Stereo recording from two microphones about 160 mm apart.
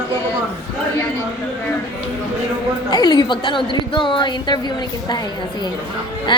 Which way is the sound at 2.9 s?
25° left (ahead or behind).